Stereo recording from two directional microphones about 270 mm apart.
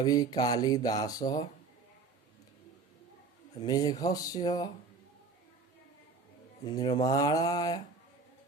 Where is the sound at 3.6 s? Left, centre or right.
Centre.